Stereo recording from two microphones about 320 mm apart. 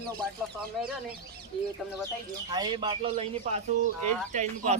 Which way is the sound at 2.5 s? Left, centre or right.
Centre.